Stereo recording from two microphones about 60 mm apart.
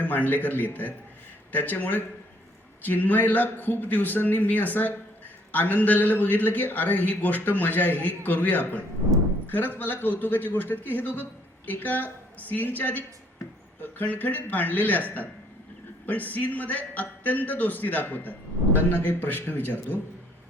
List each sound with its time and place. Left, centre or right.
0.0 s a man's voice: left